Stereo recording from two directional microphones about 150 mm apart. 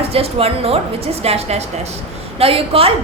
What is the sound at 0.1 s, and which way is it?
A woman's voice, 40° right (ahead or behind).